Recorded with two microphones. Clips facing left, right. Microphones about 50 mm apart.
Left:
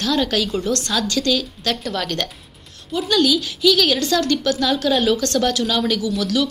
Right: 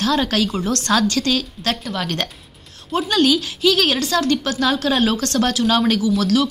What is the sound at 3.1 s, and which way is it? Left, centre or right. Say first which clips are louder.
A woman's voice: even; right.